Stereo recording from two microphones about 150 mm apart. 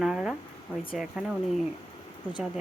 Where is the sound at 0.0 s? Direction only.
Centre (ahead or behind).